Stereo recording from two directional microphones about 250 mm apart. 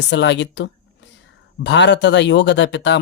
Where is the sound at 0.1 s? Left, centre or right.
Left.